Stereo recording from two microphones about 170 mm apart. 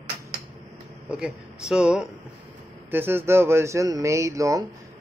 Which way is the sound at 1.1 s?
5° right (ahead or behind).